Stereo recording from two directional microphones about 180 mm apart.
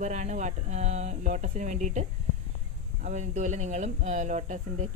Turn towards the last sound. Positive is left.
turn(degrees=-40)  # may be behind; listen again after turning